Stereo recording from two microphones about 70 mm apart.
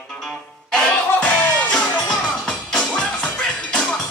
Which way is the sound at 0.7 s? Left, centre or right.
Centre.